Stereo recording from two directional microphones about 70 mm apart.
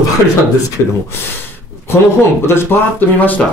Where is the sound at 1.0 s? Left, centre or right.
Left.